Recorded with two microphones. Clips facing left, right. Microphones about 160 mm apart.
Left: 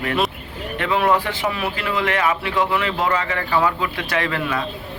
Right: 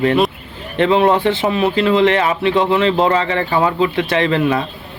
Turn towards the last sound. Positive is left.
turn(degrees=-25)  # may be behind; listen again after turning